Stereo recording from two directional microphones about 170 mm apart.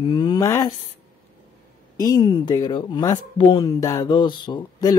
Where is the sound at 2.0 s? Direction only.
25° left (ahead or behind).